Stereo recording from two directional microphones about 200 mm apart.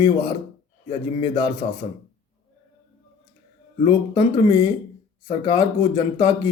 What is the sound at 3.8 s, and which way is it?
Speech, 25° left (ahead or behind).